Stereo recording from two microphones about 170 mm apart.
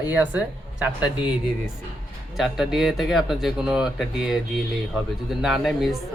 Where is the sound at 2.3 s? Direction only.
5° right (ahead or behind).